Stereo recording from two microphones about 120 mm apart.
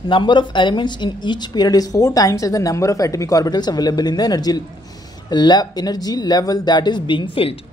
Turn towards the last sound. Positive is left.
turn(degrees=50)  # may be behind; listen again after turning